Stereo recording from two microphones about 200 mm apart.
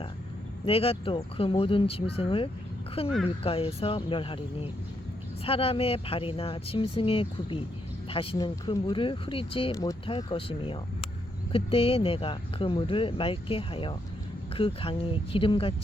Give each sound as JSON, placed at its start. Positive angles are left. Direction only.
{"t": 0.6, "sound": "speech", "side_deg": 30}